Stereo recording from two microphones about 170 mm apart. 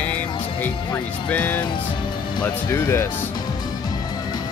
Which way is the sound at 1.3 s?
10° left (ahead or behind).